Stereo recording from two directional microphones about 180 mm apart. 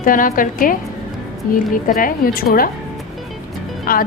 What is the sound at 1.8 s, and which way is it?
Speech, 50° left (ahead or behind).